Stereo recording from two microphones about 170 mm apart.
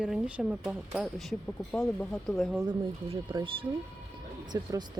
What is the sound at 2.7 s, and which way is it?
Speech, 25° right (ahead or behind).